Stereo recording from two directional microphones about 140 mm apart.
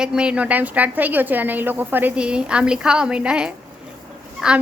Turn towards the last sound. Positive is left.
turn(degrees=-5)  # may be behind; listen again after turning